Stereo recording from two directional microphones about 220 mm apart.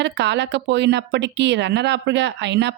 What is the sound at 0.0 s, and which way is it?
A woman's voice, 50° right (ahead or behind).